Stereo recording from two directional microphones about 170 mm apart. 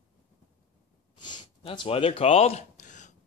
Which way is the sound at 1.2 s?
25° left (ahead or behind).